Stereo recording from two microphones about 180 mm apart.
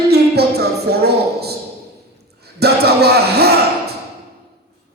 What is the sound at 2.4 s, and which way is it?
Speech, 65° right (ahead or behind).